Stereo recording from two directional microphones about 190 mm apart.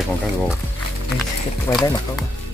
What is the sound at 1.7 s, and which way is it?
Speech, 15° left (ahead or behind).